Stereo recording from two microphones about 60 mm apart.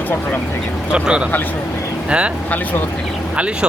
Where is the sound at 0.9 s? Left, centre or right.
Centre.